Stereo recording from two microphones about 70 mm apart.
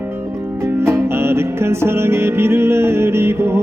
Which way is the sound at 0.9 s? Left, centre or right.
Right.